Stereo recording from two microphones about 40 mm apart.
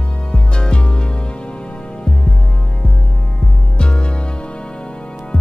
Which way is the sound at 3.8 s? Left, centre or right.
Left.